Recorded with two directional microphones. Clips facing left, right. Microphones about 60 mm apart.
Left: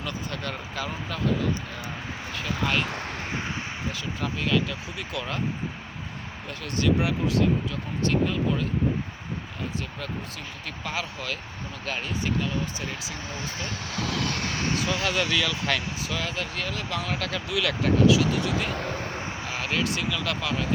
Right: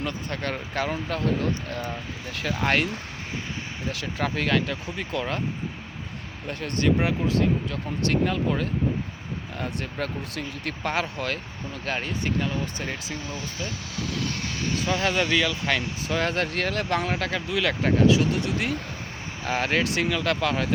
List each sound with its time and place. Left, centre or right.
0.0 s speech: right
4.2 s speech: right
6.5 s speech: right
9.6 s speech: right
13.9 s speech: left
14.8 s speech: right
16.0 s speech: right
16.3 s speech: right
17.1 s speech: right
18.7 s speech: left
19.5 s speech: right